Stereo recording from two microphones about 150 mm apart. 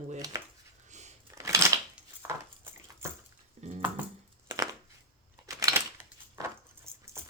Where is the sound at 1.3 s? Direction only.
20° right (ahead or behind).